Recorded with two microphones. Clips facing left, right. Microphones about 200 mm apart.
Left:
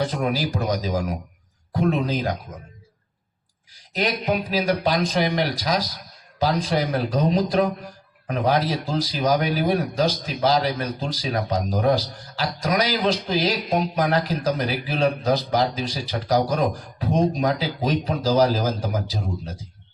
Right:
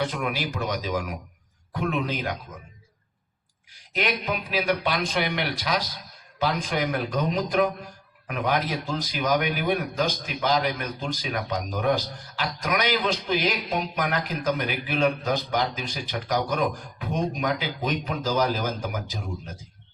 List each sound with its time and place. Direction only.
0.0 s speech: 35° left (ahead or behind)
3.8 s speech: 40° left (ahead or behind)